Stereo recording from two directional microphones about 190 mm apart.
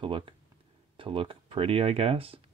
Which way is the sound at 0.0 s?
25° right (ahead or behind).